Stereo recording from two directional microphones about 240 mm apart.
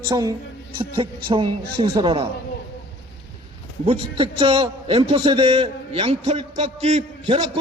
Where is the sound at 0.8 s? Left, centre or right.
Right.